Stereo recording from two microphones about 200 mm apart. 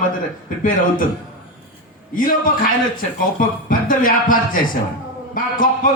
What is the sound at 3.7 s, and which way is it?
A man's voice, 45° left (ahead or behind).